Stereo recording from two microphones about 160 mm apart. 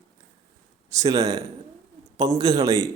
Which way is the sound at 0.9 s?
20° right (ahead or behind).